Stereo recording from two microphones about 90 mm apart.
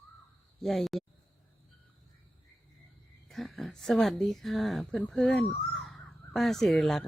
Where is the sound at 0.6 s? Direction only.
Centre (ahead or behind).